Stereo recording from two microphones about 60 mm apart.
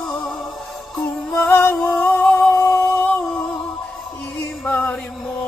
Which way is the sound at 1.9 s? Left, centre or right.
Left.